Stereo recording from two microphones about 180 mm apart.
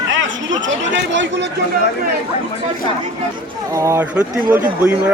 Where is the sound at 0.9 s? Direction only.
90° right.